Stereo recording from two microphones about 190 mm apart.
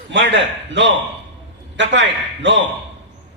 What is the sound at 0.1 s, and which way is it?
A man's voice, 70° right (ahead or behind).